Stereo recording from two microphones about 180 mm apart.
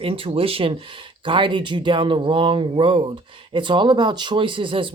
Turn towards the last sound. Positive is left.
turn(degrees=-30)  # may be behind; listen again after turning